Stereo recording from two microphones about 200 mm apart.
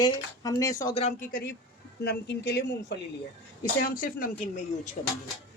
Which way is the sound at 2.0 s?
60° left (ahead or behind).